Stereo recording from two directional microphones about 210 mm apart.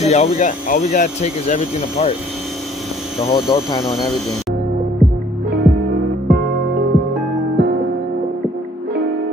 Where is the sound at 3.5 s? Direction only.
20° left (ahead or behind).